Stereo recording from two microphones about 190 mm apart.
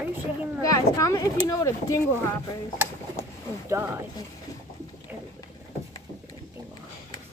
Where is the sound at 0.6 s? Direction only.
15° left (ahead or behind).